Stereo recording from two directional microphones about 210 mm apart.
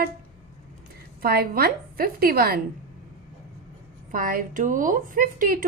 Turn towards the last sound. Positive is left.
turn(degrees=-40)  # may be behind; listen again after turning